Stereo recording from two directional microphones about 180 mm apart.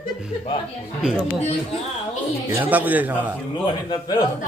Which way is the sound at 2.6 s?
10° right (ahead or behind).